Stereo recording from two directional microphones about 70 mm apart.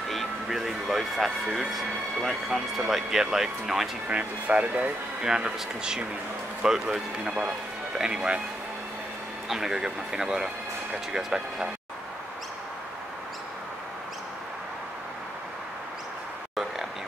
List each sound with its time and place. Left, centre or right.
0.1 s speech: centre
4.1 s speech: centre
9.5 s speech: centre